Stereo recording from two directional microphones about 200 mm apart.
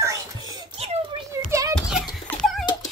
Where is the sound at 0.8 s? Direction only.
30° right (ahead or behind).